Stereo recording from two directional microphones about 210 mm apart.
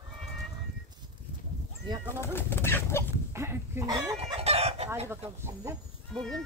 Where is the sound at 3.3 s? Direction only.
10° right (ahead or behind).